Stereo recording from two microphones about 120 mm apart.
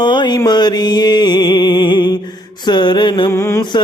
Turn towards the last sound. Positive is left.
turn(degrees=25)  # may be behind; listen again after turning